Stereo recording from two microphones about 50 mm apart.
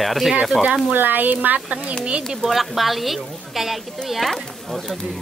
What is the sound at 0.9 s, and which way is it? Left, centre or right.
Speech, right.